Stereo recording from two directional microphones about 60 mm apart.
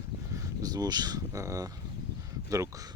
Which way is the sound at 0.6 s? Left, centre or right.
Right.